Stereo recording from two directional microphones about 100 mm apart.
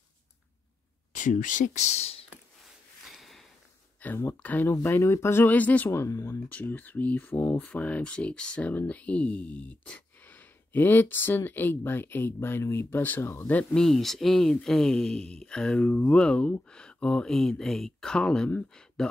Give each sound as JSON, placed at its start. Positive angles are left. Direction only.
{"t": 1.9, "sound": "speech", "side_deg": 90}
{"t": 3.1, "sound": "a sound", "side_deg": 0}
{"t": 4.0, "sound": "speech", "side_deg": 20}
{"t": 5.9, "sound": "speech", "side_deg": 30}
{"t": 6.5, "sound": "speech", "side_deg": 15}
{"t": 13.7, "sound": "speech", "side_deg": 5}